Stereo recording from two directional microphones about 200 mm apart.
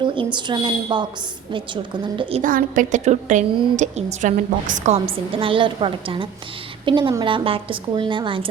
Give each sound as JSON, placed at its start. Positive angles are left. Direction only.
{"t": 0.0, "sound": "a woman's voice", "side_deg": -25}
{"t": 2.4, "sound": "a woman's voice", "side_deg": -40}